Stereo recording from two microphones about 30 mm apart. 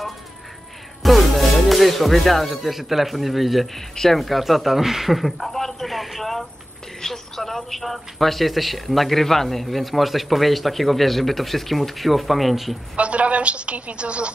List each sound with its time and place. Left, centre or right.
1.0 s music: centre
2.8 s a man's voice: centre
5.5 s speech: centre
7.0 s a woman's voice: centre
12.9 s a woman's voice: right